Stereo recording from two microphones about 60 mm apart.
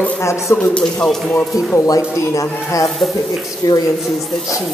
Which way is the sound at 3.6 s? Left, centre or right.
Left.